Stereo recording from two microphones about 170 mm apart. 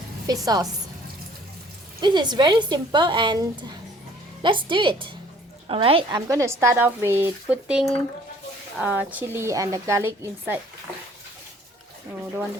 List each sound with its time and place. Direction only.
0.4 s a woman's voice: 20° right (ahead or behind)
2.0 s a woman's voice: 25° right (ahead or behind)